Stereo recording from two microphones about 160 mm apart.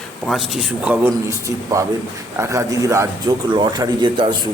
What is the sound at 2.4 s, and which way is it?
A man's voice, 20° right (ahead or behind).